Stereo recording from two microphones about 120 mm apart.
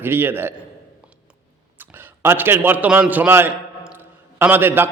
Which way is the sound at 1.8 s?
15° right (ahead or behind).